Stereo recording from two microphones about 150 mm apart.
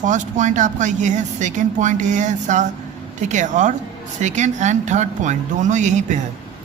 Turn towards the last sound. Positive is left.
turn(degrees=-55)  # may be behind; listen again after turning